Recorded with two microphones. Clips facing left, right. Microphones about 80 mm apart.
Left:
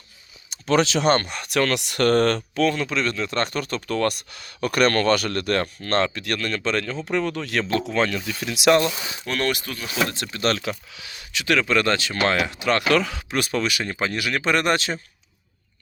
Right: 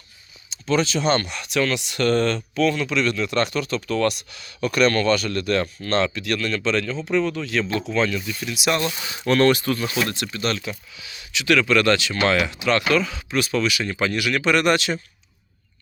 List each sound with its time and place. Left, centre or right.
0.5 s speech: left
1.1 s speech: left
1.5 s speech: left
2.6 s speech: left
8.2 s speech: left
8.4 s speech: left
9.2 s speech: centre
10.3 s speech: left
11.7 s speech: left
12.9 s speech: left